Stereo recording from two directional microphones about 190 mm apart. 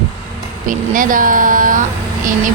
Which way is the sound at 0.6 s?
45° right (ahead or behind).